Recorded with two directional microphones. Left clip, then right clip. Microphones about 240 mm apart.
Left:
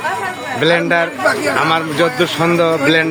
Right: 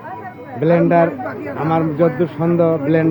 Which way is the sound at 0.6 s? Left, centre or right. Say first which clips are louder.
Even; centre.